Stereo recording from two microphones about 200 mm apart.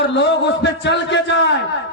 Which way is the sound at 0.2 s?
60° left (ahead or behind).